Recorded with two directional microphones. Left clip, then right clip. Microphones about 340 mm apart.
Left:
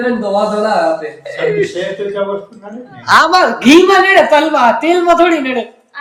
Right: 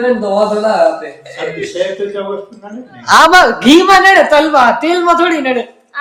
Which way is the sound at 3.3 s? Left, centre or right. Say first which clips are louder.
Right 1 dB; centre.